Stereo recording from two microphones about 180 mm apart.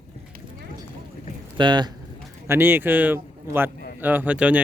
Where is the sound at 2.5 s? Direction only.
10° right (ahead or behind).